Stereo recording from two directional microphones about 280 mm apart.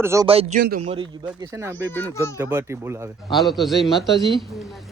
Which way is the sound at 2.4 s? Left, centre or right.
Centre.